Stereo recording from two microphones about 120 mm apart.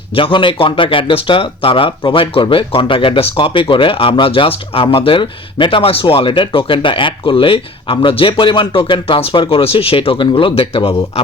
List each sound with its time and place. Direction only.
0.2 s speech: 45° left (ahead or behind)